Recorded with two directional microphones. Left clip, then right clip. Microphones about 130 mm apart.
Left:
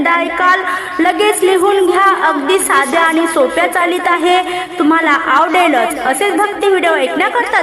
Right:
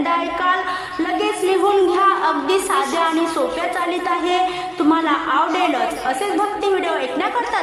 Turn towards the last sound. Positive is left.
turn(degrees=35)  # may be behind; listen again after turning